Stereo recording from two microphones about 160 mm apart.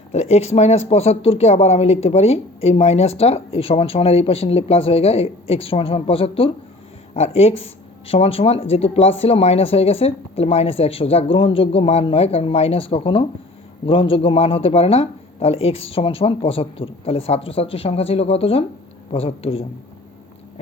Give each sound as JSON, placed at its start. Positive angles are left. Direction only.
{"t": 0.1, "sound": "speech", "side_deg": 40}